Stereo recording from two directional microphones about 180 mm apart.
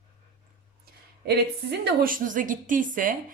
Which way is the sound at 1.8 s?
55° right (ahead or behind).